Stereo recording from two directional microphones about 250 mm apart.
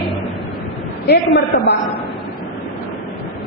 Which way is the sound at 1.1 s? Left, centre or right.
Left.